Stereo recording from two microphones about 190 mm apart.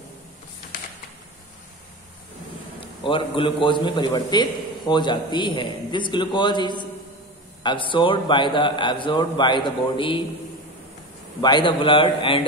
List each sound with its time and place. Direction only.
3.0 s a man's voice: 25° left (ahead or behind)
11.4 s a man's voice: 25° left (ahead or behind)